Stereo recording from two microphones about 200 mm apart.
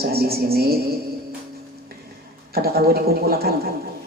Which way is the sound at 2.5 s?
50° right (ahead or behind).